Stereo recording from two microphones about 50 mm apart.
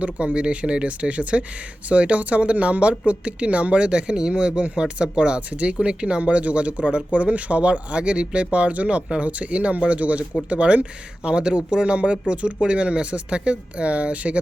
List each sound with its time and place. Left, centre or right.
0.0 s speech: right